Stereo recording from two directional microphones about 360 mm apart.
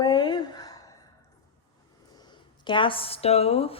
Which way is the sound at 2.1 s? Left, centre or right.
Centre.